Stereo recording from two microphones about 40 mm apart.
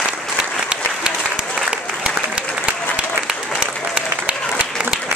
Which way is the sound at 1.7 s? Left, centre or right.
Right.